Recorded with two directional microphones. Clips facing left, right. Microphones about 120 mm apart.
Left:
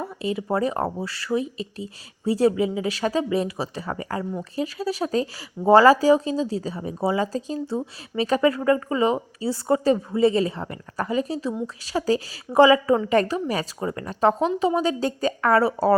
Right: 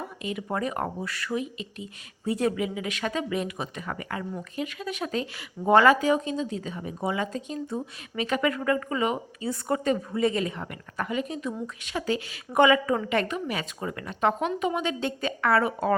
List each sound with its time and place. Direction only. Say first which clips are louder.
0.0 s speech: left 6 dB; 30° left (ahead or behind)